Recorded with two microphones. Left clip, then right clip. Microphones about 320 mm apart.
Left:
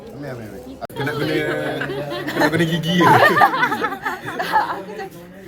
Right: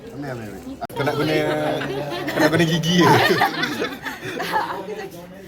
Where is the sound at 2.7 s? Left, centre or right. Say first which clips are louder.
Left 2 dB; centre.